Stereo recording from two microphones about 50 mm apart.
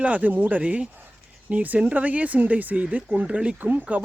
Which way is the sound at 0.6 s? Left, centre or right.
Right.